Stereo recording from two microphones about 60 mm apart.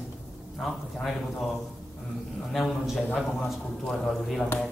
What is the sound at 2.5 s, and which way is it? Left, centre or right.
Speech, centre.